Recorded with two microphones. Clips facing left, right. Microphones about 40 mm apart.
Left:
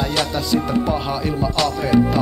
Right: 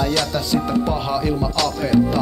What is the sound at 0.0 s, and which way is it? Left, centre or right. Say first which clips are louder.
Speech: right 1 dB; centre.